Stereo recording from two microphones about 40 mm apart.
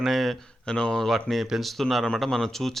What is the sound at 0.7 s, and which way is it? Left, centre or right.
Speech, left.